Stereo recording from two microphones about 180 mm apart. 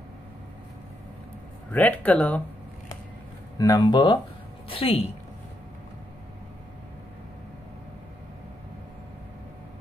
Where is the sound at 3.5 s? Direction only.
20° left (ahead or behind).